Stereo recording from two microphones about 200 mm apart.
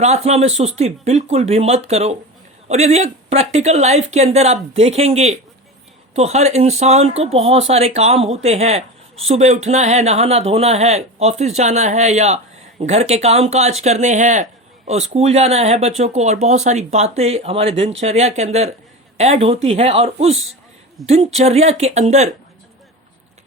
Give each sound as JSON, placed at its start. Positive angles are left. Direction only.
{"t": 0.0, "sound": "a woman's voice", "side_deg": -35}
{"t": 21.0, "sound": "speech", "side_deg": 0}
{"t": 21.3, "sound": "speech", "side_deg": -35}